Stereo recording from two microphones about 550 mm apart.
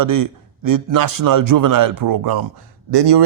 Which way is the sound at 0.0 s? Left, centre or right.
Right.